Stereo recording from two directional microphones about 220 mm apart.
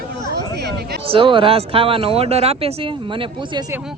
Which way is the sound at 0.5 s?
50° right (ahead or behind).